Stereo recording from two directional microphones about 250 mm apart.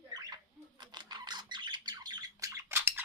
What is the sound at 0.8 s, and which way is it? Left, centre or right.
Squawk, centre.